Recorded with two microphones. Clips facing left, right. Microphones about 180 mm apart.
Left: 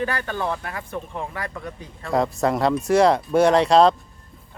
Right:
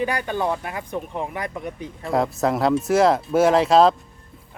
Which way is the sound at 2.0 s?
Centre (ahead or behind).